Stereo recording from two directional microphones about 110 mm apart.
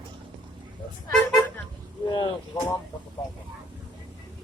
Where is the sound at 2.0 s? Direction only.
45° left (ahead or behind).